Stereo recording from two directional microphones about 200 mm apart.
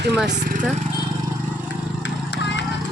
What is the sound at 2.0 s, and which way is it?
Vehicle, 60° left (ahead or behind).